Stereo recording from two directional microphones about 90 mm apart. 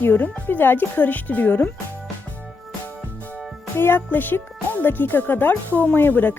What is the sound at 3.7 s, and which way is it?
Speech, 25° left (ahead or behind).